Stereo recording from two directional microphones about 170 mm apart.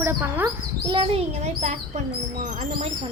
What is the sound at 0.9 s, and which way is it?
A child's voice, 30° right (ahead or behind).